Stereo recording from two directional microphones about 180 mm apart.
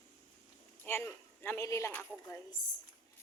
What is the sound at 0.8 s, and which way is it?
A man's voice, 15° left (ahead or behind).